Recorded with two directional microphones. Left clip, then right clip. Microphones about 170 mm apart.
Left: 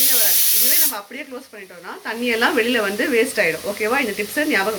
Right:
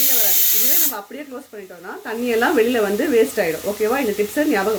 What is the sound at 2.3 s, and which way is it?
Speech, 40° right (ahead or behind).